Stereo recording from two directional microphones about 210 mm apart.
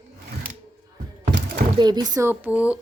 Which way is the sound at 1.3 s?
50° right (ahead or behind).